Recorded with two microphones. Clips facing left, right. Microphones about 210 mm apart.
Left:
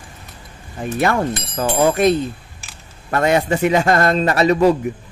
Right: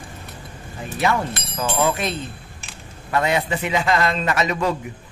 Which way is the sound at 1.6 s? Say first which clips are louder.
Left 6 dB; 40° left (ahead or behind).